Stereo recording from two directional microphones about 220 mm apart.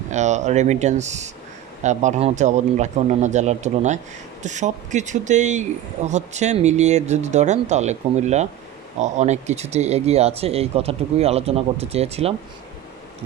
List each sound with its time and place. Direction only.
0.1 s speech: 30° right (ahead or behind)